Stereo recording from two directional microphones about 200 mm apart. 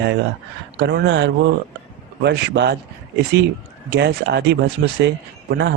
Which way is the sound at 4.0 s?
55° right (ahead or behind).